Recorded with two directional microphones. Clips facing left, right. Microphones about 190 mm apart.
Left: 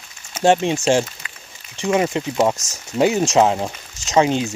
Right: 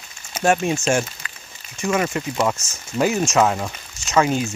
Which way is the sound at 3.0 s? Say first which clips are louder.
Left 3 dB; 20° left (ahead or behind).